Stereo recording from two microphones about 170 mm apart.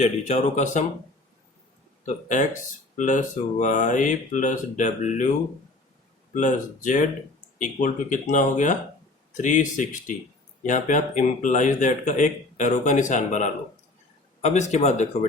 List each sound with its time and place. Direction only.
0.0 s speech: 45° left (ahead or behind)
2.0 s speech: 45° left (ahead or behind)
6.3 s speech: 50° left (ahead or behind)
14.7 s speech: 40° left (ahead or behind)